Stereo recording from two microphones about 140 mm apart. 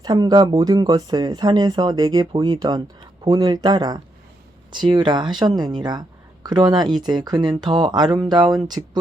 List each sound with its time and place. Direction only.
0.0 s speech: 30° right (ahead or behind)